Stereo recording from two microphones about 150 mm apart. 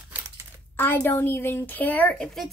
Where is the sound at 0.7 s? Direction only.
15° left (ahead or behind).